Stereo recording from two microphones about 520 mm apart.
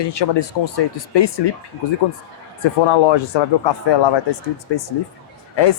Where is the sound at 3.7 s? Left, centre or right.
Left.